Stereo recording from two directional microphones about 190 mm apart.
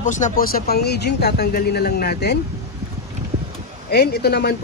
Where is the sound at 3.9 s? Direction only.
55° left (ahead or behind).